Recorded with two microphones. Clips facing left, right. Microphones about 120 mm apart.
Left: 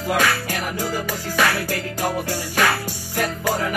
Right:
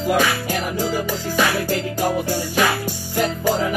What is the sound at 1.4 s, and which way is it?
Music, 15° right (ahead or behind).